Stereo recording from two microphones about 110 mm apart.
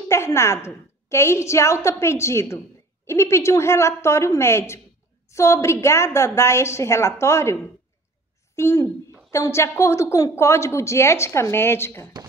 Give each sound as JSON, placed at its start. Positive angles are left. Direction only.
{"t": 0.1, "sound": "a woman's voice", "side_deg": 25}
{"t": 8.5, "sound": "a woman's voice", "side_deg": 25}